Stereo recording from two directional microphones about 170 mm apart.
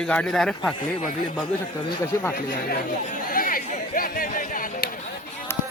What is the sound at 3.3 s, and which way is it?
Chatter, 55° left (ahead or behind).